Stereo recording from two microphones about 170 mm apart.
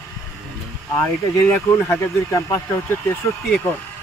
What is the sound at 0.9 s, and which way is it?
Speech, 20° left (ahead or behind).